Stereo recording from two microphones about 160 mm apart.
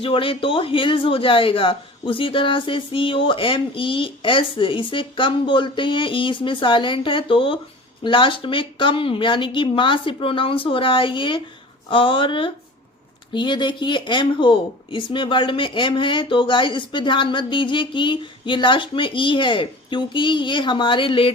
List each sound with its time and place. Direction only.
0.0 s speech: 35° left (ahead or behind)